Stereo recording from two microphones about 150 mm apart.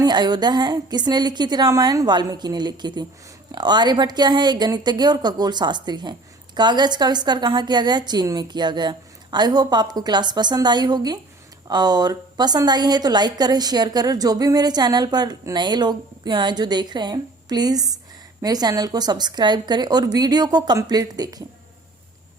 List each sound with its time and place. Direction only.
0.0 s a woman's voice: 30° right (ahead or behind)